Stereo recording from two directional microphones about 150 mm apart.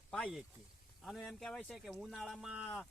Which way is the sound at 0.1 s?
Centre (ahead or behind).